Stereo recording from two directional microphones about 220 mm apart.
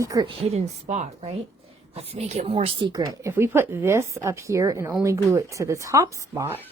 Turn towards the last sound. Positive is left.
turn(degrees=-10)  # may be behind; listen again after turning